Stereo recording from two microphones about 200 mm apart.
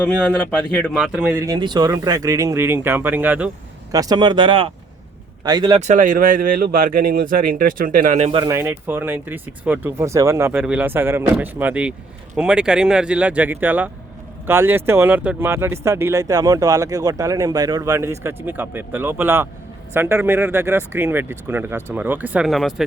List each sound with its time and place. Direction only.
0.0 s speech: 5° left (ahead or behind)
0.9 s speech: 5° right (ahead or behind)
3.9 s speech: 20° right (ahead or behind)
5.8 s speech: 40° right (ahead or behind)
8.3 s speech: 25° right (ahead or behind)
8.5 s speech: 10° right (ahead or behind)